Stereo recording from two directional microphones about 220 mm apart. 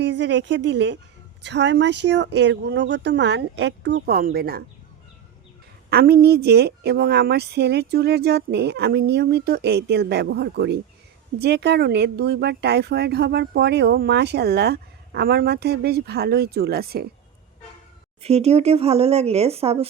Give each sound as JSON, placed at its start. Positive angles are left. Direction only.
{"t": 0.0, "sound": "speech", "side_deg": -55}
{"t": 5.9, "sound": "speech", "side_deg": -45}
{"t": 18.2, "sound": "speech", "side_deg": -30}